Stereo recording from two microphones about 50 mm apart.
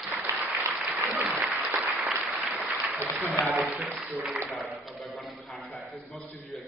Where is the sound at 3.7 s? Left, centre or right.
Right.